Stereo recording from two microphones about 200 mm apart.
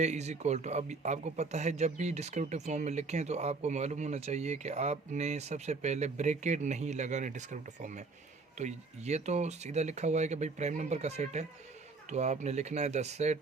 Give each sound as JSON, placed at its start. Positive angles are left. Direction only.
{"t": 0.0, "sound": "speech", "side_deg": -35}